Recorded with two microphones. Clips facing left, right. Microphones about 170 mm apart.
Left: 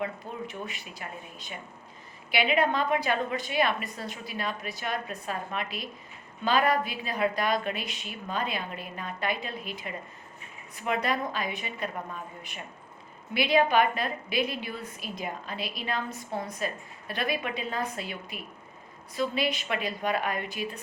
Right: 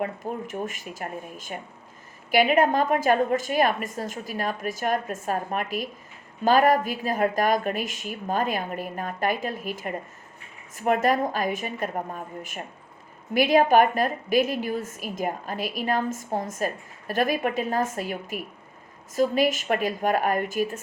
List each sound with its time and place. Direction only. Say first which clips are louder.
0.0 s a woman's voice: right 5 dB; 45° right (ahead or behind)